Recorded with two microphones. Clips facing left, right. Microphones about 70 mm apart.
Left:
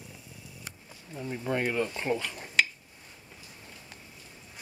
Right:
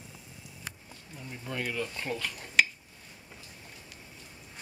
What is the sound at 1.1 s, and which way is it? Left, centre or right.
Speech, left.